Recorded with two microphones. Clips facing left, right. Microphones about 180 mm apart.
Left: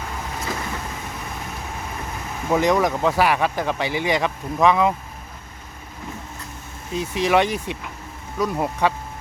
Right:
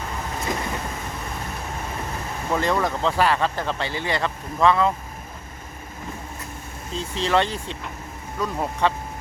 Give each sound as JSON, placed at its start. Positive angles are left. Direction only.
{"t": 0.5, "sound": "vehicle", "side_deg": -20}
{"t": 2.5, "sound": "speech", "side_deg": 15}
{"t": 6.9, "sound": "speech", "side_deg": 15}